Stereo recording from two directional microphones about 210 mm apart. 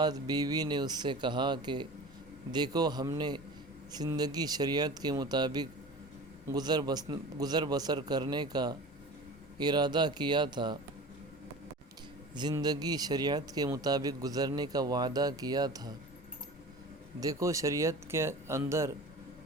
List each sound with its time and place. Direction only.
0.0 s speech: 20° right (ahead or behind)
12.3 s speech: 20° right (ahead or behind)
17.2 s a man's voice: 15° right (ahead or behind)